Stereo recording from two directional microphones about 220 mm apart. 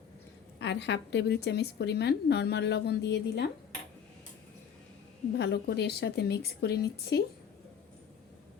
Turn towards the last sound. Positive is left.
turn(degrees=45)  # may be behind; listen again after turning